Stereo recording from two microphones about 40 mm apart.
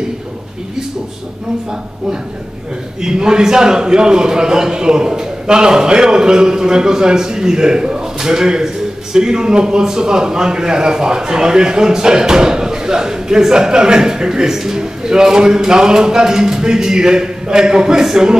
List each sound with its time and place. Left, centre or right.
3.0 s a man's voice: centre